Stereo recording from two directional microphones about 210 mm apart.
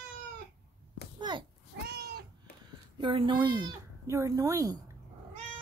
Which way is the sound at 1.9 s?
50° right (ahead or behind).